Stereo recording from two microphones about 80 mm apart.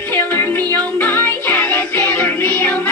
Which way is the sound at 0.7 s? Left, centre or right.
Left.